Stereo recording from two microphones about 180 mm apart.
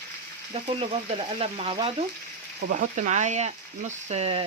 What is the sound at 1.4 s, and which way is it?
Speech, 35° right (ahead or behind).